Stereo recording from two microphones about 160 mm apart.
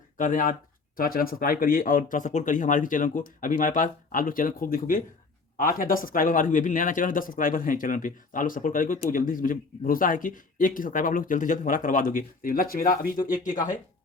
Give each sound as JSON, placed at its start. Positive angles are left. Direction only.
{"t": 0.2, "sound": "speech", "side_deg": 55}